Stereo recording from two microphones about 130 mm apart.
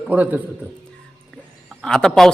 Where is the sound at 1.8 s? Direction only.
5° left (ahead or behind).